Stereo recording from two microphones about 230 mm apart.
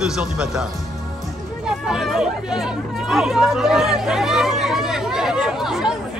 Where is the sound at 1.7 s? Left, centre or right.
Centre.